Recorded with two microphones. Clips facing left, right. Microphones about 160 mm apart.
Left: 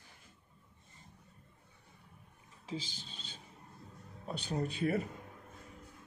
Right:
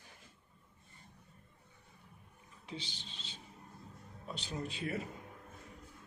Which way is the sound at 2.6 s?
45° left (ahead or behind).